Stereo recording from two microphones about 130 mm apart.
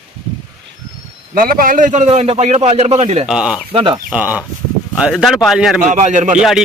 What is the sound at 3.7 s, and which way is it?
Speech, 40° right (ahead or behind).